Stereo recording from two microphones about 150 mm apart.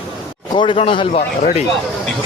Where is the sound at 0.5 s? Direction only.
35° left (ahead or behind).